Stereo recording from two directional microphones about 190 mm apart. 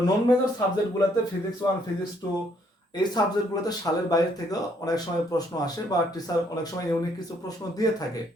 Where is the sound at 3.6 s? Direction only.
20° left (ahead or behind).